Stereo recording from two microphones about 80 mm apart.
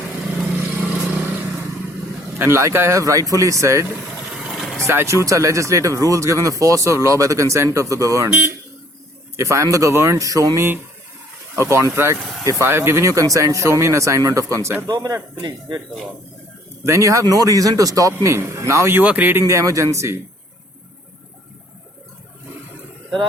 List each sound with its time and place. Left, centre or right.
0.5 s vehicle: right
2.4 s speech: right
4.3 s vehicle: centre
4.8 s speech: right
8.3 s speech: centre
9.3 s speech: right
16.8 s speech: right
18.9 s speech: right